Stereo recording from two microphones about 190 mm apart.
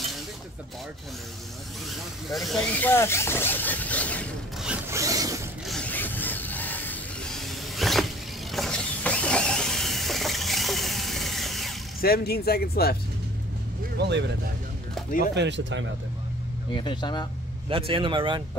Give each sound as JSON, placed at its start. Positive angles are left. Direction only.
{"t": 2.2, "sound": "speech", "side_deg": 0}
{"t": 4.6, "sound": "a sound", "side_deg": -15}
{"t": 5.7, "sound": "a sound", "side_deg": 5}
{"t": 12.0, "sound": "speech", "side_deg": 55}
{"t": 13.9, "sound": "speech", "side_deg": -65}
{"t": 15.3, "sound": "speech", "side_deg": -70}
{"t": 16.7, "sound": "speech", "side_deg": 25}
{"t": 17.6, "sound": "speech", "side_deg": -30}